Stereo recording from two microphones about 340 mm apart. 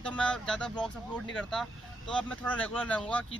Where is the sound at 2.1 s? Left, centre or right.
Centre.